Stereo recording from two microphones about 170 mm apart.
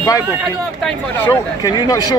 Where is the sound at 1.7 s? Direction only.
25° left (ahead or behind).